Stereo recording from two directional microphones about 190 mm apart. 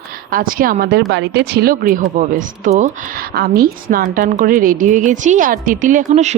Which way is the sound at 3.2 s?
50° right (ahead or behind).